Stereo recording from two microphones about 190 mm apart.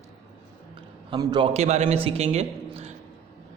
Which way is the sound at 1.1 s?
20° right (ahead or behind).